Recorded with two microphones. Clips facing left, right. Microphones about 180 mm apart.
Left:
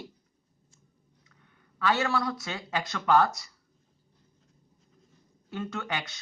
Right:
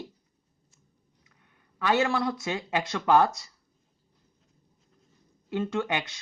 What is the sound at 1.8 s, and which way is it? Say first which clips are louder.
Speech: right 2 dB; 20° right (ahead or behind).